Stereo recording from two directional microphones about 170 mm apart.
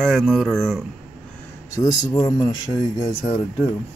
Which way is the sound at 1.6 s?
20° left (ahead or behind).